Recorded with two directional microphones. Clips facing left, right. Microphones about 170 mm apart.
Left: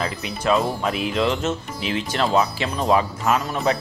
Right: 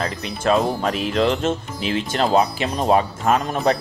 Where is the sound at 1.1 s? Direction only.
45° right (ahead or behind).